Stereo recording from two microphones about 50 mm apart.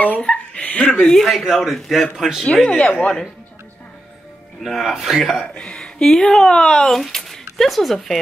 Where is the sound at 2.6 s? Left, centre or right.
Left.